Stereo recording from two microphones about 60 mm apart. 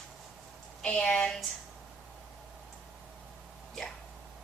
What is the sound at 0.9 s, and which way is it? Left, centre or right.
Speech, centre.